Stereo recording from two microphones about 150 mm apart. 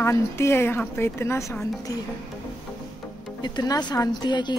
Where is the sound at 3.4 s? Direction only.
30° left (ahead or behind).